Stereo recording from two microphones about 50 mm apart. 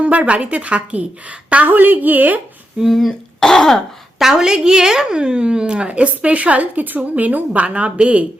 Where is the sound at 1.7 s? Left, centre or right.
Right.